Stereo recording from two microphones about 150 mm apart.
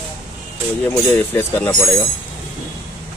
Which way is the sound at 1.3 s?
20° left (ahead or behind).